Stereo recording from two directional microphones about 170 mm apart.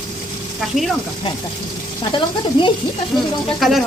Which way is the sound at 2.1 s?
30° left (ahead or behind).